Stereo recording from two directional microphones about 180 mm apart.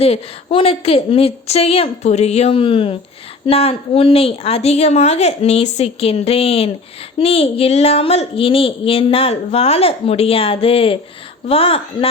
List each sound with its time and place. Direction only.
0.0 s speech: 35° left (ahead or behind)